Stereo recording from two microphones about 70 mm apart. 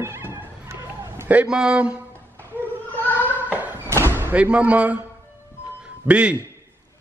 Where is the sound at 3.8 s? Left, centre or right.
Right.